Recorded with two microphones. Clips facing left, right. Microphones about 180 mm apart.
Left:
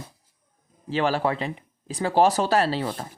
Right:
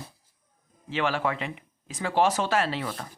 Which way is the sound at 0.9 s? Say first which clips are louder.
Left 4 dB; 35° left (ahead or behind).